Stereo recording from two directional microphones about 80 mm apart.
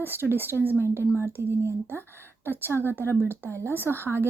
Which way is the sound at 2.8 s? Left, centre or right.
Right.